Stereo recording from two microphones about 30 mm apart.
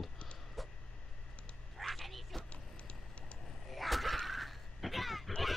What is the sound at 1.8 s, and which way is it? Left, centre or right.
Bow-wow, centre.